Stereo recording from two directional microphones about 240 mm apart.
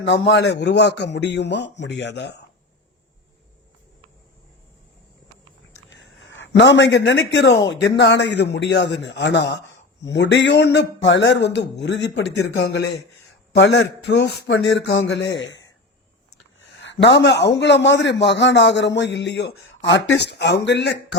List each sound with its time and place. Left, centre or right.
0.0 s a man's voice: left
5.9 s a man's voice: left
16.8 s a man's voice: left